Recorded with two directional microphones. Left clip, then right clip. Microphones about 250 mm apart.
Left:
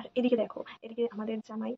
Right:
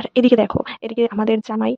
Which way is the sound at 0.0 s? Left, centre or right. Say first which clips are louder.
Right 14 dB; right.